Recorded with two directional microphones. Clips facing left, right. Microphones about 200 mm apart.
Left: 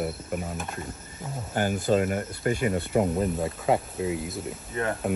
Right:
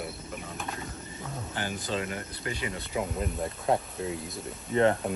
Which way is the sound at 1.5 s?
45° left (ahead or behind).